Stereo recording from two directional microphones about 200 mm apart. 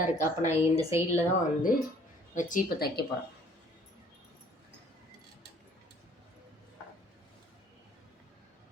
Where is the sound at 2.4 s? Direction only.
40° left (ahead or behind).